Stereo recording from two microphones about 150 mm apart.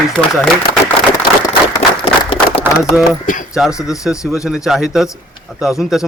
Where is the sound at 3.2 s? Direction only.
65° left (ahead or behind).